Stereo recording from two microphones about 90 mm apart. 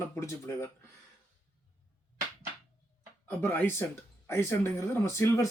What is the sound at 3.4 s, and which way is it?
Speech, 20° left (ahead or behind).